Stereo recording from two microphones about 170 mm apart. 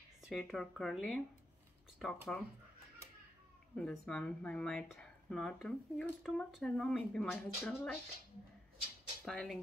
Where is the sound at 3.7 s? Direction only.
5° left (ahead or behind).